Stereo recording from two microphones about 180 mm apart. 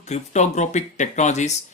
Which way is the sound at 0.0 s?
40° left (ahead or behind).